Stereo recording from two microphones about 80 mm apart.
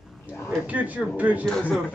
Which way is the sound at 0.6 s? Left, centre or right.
Centre.